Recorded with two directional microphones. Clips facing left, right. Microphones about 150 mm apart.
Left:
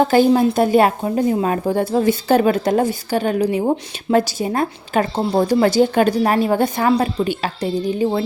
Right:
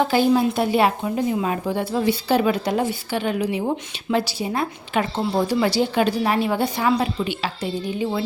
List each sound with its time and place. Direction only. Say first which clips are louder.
0.0 s speech: left 4 dB; 45° left (ahead or behind)